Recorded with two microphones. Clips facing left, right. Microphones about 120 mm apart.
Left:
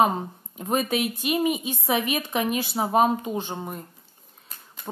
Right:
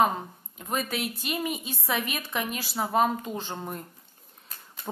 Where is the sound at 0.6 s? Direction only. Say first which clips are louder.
Left 6 dB; 25° left (ahead or behind).